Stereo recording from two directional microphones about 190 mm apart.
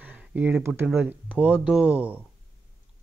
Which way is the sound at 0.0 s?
10° right (ahead or behind).